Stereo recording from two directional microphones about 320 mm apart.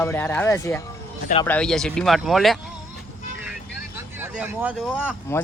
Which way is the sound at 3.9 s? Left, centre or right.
Centre.